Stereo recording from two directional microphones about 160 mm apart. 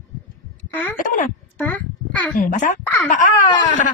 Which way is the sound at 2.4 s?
55° left (ahead or behind).